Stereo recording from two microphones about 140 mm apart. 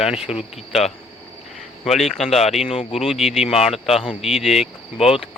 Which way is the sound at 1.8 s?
Centre (ahead or behind).